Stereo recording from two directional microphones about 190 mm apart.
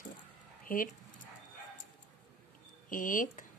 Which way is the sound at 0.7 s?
50° left (ahead or behind).